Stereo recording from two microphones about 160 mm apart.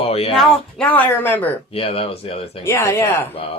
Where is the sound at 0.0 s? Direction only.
35° left (ahead or behind).